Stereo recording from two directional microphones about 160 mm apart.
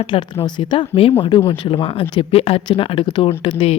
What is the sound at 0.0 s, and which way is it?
A woman's voice, 30° left (ahead or behind).